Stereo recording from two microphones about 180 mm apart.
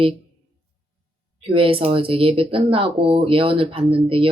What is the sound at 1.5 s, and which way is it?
Speech, 30° right (ahead or behind).